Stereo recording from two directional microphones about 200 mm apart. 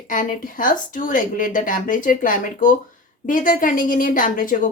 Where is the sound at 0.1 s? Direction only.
40° left (ahead or behind).